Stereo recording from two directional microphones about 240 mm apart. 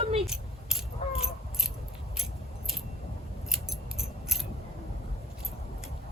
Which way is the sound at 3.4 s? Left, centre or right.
Centre.